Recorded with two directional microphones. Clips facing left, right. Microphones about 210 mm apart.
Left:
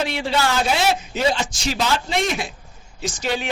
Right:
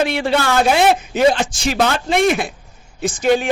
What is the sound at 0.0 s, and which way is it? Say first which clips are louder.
A man's voice: right 5 dB; 55° right (ahead or behind).